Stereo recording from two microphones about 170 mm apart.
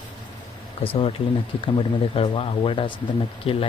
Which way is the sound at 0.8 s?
30° left (ahead or behind).